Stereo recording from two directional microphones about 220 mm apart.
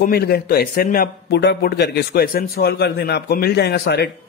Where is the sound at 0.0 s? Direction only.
45° left (ahead or behind).